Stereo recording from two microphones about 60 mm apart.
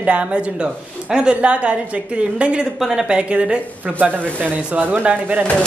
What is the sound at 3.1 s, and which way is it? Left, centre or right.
Speech, centre.